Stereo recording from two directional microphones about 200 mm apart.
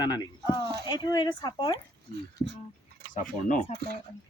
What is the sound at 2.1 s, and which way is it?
Speech, 50° right (ahead or behind).